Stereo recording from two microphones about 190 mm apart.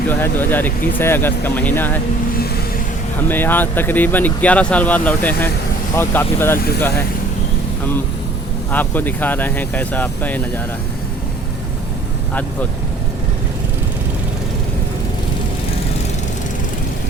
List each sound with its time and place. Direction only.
0.1 s speech: 10° left (ahead or behind)
3.2 s speech: 10° left (ahead or behind)
8.7 s speech: 10° left (ahead or behind)